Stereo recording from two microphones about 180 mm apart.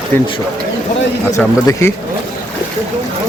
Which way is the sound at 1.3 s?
15° left (ahead or behind).